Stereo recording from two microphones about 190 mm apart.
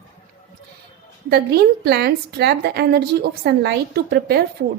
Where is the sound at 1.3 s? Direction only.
60° right (ahead or behind).